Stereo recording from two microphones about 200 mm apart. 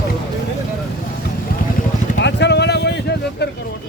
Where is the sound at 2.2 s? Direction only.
60° left (ahead or behind).